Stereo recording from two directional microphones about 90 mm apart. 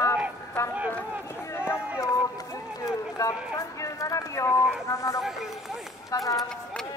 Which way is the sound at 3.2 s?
40° left (ahead or behind).